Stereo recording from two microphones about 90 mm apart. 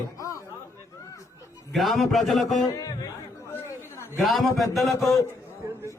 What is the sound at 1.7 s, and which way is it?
Speech, centre (ahead or behind).